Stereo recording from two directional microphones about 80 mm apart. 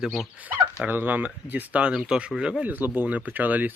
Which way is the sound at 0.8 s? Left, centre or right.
Right.